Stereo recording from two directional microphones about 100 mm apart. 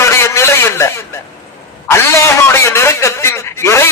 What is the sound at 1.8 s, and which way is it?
A man's voice, 25° left (ahead or behind).